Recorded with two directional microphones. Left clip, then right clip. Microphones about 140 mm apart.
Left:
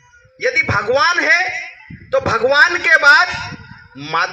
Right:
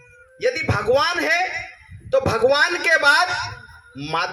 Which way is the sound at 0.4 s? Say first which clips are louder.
Left 6 dB; 35° right (ahead or behind).